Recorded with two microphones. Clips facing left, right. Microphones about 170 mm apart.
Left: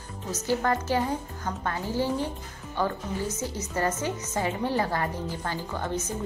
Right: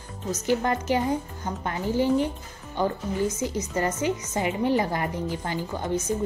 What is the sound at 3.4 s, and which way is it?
A woman's voice, 15° right (ahead or behind).